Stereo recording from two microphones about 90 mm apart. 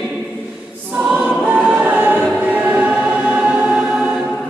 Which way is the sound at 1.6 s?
15° right (ahead or behind).